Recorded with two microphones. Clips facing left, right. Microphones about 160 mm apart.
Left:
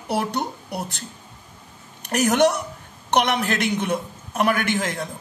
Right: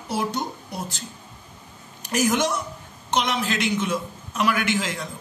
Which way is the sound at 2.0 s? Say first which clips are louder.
Left 4 dB; 60° left (ahead or behind).